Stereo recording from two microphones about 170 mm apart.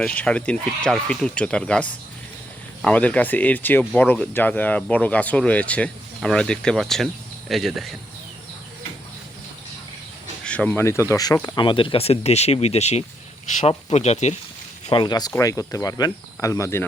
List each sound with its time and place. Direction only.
0.0 s speech: 5° left (ahead or behind)
10.4 s speech: 5° left (ahead or behind); by 14.3 s 40° left (ahead or behind)
14.8 s speech: 30° left (ahead or behind)